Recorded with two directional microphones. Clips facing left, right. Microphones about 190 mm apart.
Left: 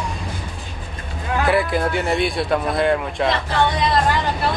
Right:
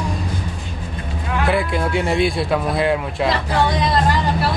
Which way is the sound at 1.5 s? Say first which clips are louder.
Even; centre (ahead or behind).